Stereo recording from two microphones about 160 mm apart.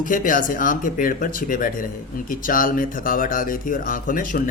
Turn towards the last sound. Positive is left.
turn(degrees=60)  # may be behind; listen again after turning